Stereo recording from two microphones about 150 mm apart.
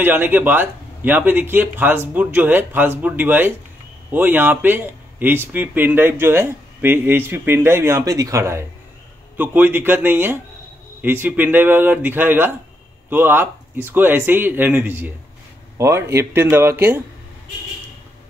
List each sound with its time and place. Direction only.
0.0 s speech: 15° right (ahead or behind)